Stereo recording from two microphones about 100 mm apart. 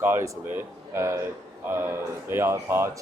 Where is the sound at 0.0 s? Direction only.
20° right (ahead or behind).